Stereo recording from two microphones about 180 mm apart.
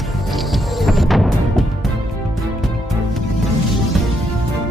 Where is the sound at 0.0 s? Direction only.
Centre (ahead or behind).